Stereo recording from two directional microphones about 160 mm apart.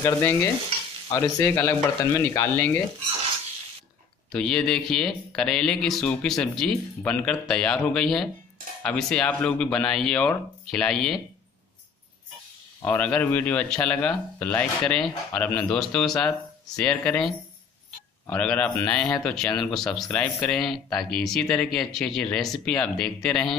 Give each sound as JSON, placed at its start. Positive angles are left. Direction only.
{"t": 0.0, "sound": "speech", "side_deg": 15}
{"t": 4.3, "sound": "speech", "side_deg": 5}
{"t": 12.8, "sound": "speech", "side_deg": 10}
{"t": 18.3, "sound": "speech", "side_deg": 10}